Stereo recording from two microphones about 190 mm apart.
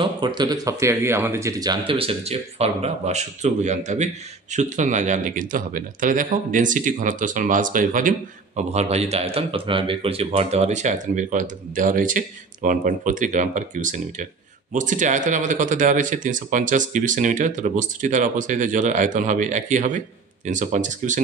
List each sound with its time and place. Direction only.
0.0 s speech: 25° right (ahead or behind); by 21.2 s 40° right (ahead or behind)